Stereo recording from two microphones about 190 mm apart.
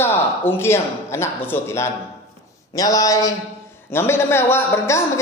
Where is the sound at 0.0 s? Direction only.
10° left (ahead or behind).